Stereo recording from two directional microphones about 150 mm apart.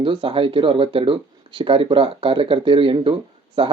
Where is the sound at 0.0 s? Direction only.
35° right (ahead or behind).